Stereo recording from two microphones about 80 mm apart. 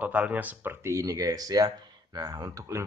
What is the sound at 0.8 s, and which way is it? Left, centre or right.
Speech, right.